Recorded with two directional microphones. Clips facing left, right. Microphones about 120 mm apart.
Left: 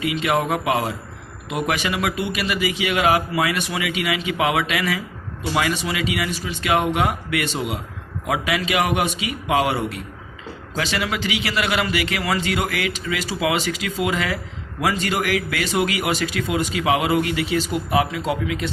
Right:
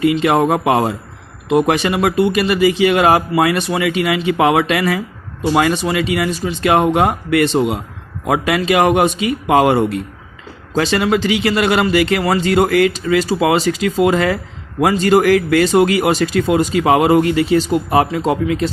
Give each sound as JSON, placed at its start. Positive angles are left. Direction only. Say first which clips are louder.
{"t": 0.0, "sound": "speech", "louder": "right 8 dB", "side_deg": -40}
{"t": 0.6, "sound": "speech", "louder": "right 7 dB", "side_deg": -55}
{"t": 1.5, "sound": "speech", "louder": "right 9 dB", "side_deg": -35}
{"t": 8.3, "sound": "speech", "louder": "right 7 dB", "side_deg": -50}